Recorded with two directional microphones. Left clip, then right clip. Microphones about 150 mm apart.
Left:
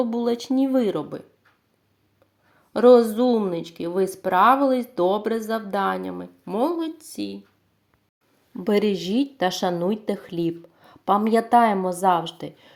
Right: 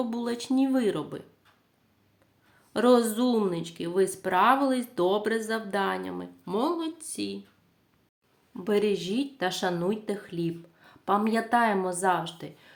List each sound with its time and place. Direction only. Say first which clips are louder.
0.0 s speech: left 8 dB; 15° left (ahead or behind)
2.7 s speech: left 8 dB; 10° left (ahead or behind)
8.6 s speech: left 4 dB; 35° left (ahead or behind)